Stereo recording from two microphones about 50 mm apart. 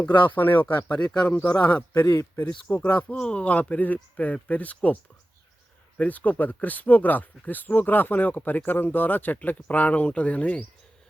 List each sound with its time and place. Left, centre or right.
0.0 s speech: left
2.0 s speech: left
2.7 s speech: left
6.0 s speech: left